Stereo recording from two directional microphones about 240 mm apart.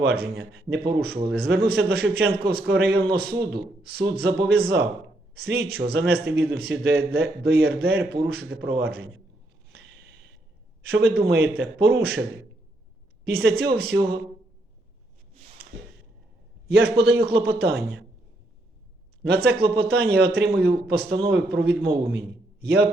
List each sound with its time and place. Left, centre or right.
0.0 s a man's voice: right
10.8 s a man's voice: right
13.2 s a man's voice: right
16.6 s a man's voice: right
19.3 s a man's voice: right